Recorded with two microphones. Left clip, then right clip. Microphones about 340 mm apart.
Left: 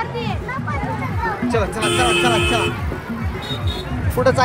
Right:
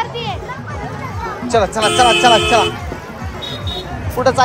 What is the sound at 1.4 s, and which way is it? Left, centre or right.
Speech, centre.